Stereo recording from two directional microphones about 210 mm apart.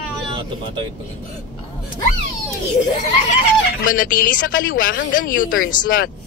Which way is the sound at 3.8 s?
40° left (ahead or behind).